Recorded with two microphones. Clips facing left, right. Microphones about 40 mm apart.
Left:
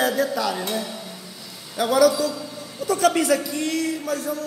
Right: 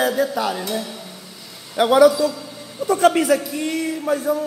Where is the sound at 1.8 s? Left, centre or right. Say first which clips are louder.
Right 5 dB; right.